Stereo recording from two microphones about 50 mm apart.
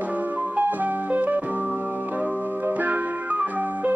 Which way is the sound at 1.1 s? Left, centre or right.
Right.